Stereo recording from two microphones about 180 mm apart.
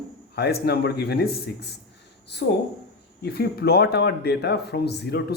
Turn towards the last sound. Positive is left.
turn(degrees=65)  # may be behind; listen again after turning